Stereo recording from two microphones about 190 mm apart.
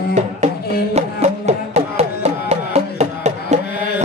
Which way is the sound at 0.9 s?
35° right (ahead or behind).